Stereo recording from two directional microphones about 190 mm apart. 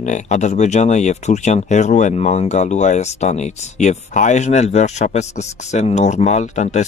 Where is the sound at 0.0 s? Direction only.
40° left (ahead or behind).